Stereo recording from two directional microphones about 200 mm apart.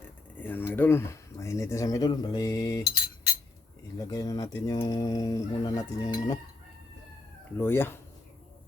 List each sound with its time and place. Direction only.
0.3 s a sound: 10° left (ahead or behind)
3.9 s speech: 20° left (ahead or behind)
7.6 s speech: 10° left (ahead or behind)